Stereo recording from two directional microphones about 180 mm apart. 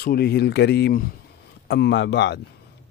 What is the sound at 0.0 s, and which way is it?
Speech, 65° left (ahead or behind).